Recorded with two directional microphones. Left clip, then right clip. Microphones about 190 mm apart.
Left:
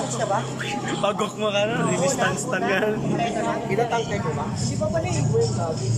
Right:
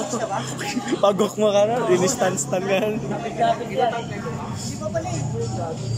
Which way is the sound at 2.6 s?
15° right (ahead or behind).